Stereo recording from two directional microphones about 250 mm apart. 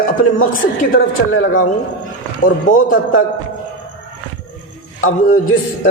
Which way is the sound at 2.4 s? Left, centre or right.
Left.